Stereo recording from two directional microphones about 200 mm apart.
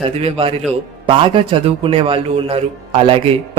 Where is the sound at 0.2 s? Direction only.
30° right (ahead or behind).